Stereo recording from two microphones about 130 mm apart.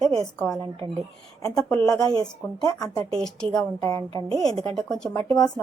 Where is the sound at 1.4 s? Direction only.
25° left (ahead or behind).